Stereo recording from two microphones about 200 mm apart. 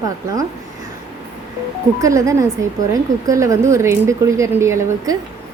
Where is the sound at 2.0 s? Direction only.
15° right (ahead or behind).